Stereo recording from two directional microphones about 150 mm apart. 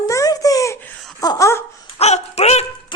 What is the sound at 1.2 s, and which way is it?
Laughter, 25° left (ahead or behind).